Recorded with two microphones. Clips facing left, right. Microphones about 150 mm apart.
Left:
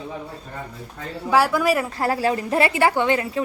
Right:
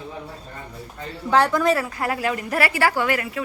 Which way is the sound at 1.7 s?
30° left (ahead or behind).